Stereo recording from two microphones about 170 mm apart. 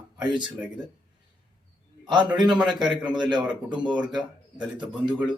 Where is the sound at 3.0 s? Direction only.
25° right (ahead or behind).